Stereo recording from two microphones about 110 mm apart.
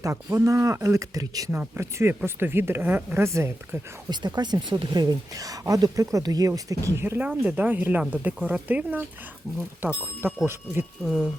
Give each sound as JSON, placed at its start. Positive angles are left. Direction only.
{"t": 0.0, "sound": "speech", "side_deg": -30}
{"t": 1.5, "sound": "speech", "side_deg": -20}
{"t": 4.1, "sound": "speech", "side_deg": -40}
{"t": 10.4, "sound": "speech", "side_deg": -20}